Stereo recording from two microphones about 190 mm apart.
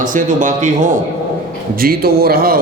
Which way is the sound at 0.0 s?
45° right (ahead or behind).